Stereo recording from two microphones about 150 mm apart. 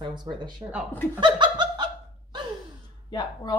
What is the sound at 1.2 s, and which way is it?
Laughter, 30° right (ahead or behind).